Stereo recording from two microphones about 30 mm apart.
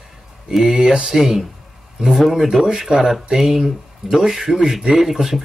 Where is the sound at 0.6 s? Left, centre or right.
Right.